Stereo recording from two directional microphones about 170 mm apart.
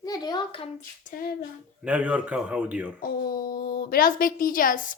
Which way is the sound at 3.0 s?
60° left (ahead or behind).